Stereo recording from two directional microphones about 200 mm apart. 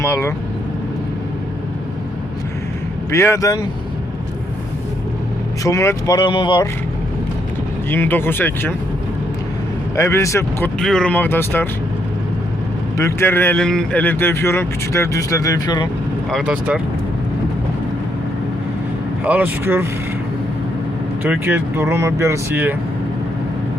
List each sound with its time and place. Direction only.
0.0 s speech: 15° left (ahead or behind)
3.1 s speech: 15° left (ahead or behind)
5.6 s speech: 15° left (ahead or behind)
7.9 s speech: 10° left (ahead or behind)
9.9 s speech: 15° left (ahead or behind)
10.8 s speech: 5° left (ahead or behind)
13.0 s speech: 15° left (ahead or behind)
16.3 s speech: 5° right (ahead or behind)
19.2 s speech: 10° right (ahead or behind)
21.2 s speech: 10° right (ahead or behind)